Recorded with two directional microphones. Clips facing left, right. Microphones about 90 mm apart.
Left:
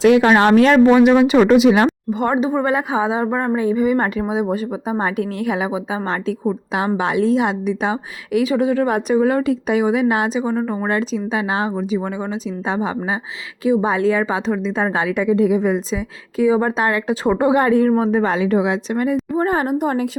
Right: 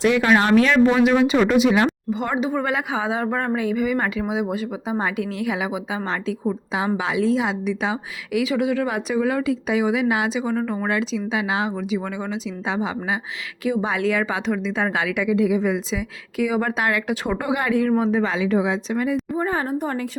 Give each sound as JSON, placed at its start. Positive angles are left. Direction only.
{"t": 0.3, "sound": "speech", "side_deg": 50}
{"t": 1.5, "sound": "speech", "side_deg": 75}
{"t": 1.8, "sound": "a woman's voice", "side_deg": 45}
{"t": 10.5, "sound": "a woman's voice", "side_deg": 25}
{"t": 13.7, "sound": "a woman's voice", "side_deg": 35}
{"t": 19.4, "sound": "a woman's voice", "side_deg": 75}